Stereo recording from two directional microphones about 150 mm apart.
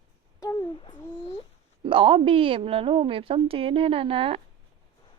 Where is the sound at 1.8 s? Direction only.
35° right (ahead or behind).